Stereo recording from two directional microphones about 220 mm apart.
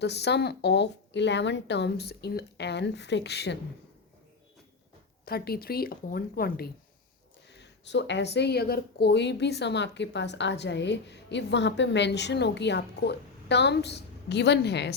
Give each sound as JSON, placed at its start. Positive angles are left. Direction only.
{"t": 0.0, "sound": "a woman's voice", "side_deg": 50}
{"t": 5.2, "sound": "a woman's voice", "side_deg": 45}